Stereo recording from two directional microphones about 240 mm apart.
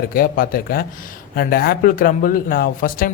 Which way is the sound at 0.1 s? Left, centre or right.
Left.